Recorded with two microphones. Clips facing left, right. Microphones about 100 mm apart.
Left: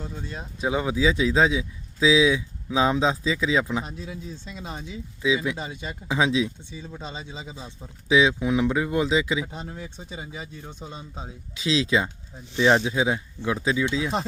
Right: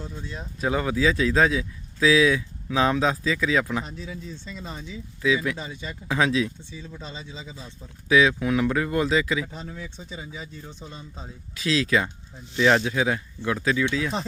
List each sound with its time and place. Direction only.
0.6 s speech: 15° left (ahead or behind)
4.6 s speech: 5° left (ahead or behind)
5.2 s speech: 20° left (ahead or behind)
7.5 s speech: 20° left (ahead or behind)
9.7 s speech: 55° left (ahead or behind)
10.8 s speech: 15° left (ahead or behind)